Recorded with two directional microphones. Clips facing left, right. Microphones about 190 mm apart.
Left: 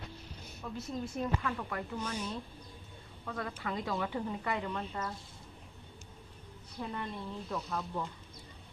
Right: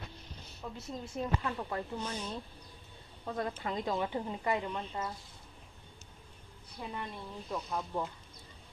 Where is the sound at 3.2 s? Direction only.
25° right (ahead or behind).